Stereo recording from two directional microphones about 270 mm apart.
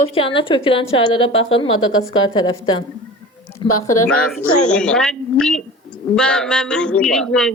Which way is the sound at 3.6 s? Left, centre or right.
Centre.